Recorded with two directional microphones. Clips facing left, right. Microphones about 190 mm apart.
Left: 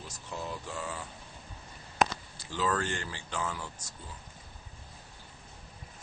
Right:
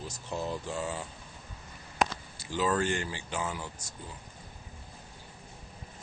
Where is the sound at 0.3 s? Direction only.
25° right (ahead or behind).